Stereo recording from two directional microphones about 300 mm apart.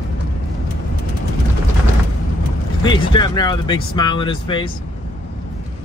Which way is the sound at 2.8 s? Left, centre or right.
Centre.